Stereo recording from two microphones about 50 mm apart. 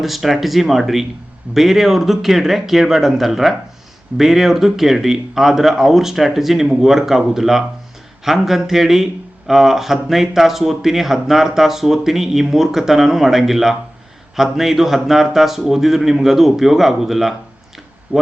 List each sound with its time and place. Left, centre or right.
0.0 s speech: centre
18.1 s speech: right